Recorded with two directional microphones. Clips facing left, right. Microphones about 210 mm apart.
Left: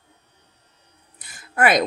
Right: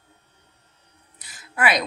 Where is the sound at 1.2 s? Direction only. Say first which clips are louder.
Left 5 dB; 50° left (ahead or behind).